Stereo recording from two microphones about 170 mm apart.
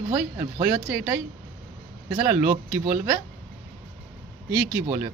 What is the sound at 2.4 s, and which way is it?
Speech, 10° right (ahead or behind).